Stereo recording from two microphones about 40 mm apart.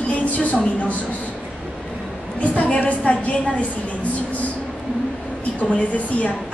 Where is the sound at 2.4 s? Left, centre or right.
Left.